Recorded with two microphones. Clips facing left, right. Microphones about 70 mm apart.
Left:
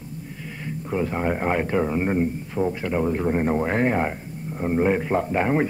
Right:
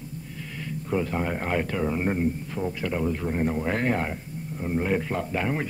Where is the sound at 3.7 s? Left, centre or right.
Left.